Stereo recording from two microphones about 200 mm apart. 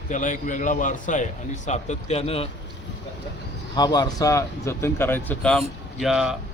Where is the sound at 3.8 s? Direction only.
20° left (ahead or behind); by 6.3 s centre (ahead or behind).